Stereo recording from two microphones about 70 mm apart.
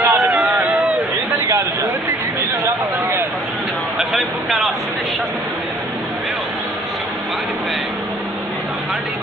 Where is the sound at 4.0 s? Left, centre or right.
Centre.